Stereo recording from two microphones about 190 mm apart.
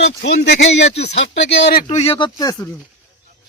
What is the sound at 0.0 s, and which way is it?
Speech, 65° left (ahead or behind).